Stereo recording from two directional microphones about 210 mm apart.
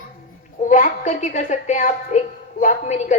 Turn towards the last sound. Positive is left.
turn(degrees=35)  # may be behind; listen again after turning